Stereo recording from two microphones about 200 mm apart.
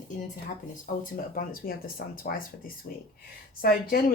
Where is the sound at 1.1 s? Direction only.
45° left (ahead or behind).